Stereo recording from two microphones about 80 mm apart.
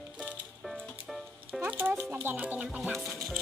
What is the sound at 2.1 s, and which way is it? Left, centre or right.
Music, right.